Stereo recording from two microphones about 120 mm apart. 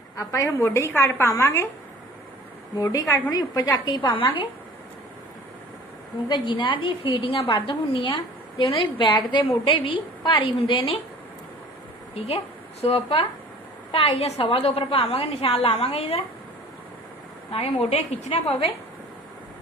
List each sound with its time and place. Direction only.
0.2 s a woman's voice: 25° left (ahead or behind)
2.8 s a woman's voice: 30° left (ahead or behind)
6.2 s a woman's voice: 40° left (ahead or behind)
12.1 s a woman's voice: 55° left (ahead or behind)
17.8 s a woman's voice: 60° left (ahead or behind)